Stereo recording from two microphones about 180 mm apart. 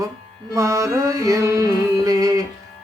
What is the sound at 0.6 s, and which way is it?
Music, 15° right (ahead or behind).